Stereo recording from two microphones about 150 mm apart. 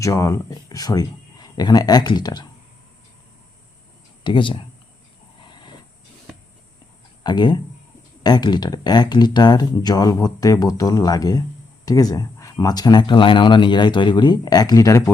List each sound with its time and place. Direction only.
0.0 s speech: 20° left (ahead or behind)
4.2 s speech: 35° left (ahead or behind)
5.5 s train: 30° left (ahead or behind)
7.3 s speech: 30° left (ahead or behind)